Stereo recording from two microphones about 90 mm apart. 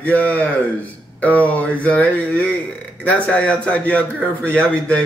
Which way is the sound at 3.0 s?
15° left (ahead or behind).